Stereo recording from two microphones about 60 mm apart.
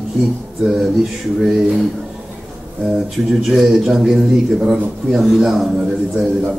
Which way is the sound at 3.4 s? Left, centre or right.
Centre.